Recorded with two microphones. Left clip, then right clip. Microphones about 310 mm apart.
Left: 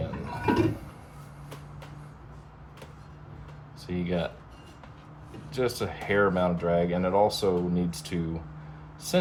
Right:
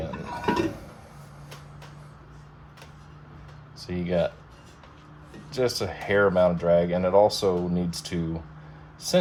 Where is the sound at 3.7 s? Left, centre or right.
Right.